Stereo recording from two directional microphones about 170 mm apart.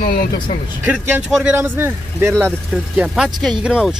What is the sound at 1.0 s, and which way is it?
Speech, 10° right (ahead or behind).